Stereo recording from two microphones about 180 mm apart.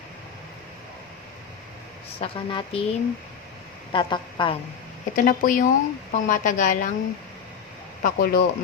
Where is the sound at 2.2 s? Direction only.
30° left (ahead or behind).